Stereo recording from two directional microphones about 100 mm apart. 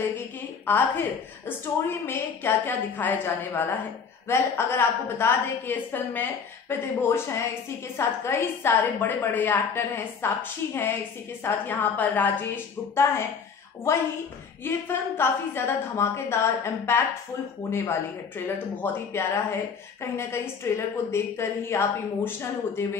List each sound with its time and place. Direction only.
0.0 s a woman's voice: 20° left (ahead or behind)
14.6 s speech: 25° left (ahead or behind)